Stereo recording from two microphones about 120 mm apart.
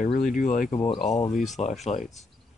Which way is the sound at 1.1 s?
70° left (ahead or behind).